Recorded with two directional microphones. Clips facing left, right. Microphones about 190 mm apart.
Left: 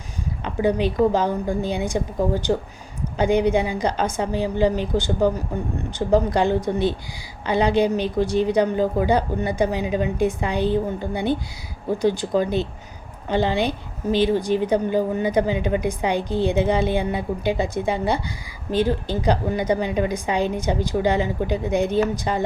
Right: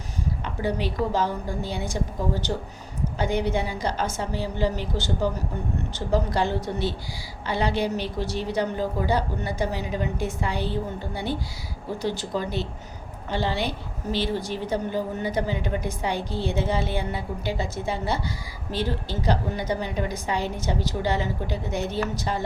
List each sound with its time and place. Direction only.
0.4 s a woman's voice: 15° left (ahead or behind)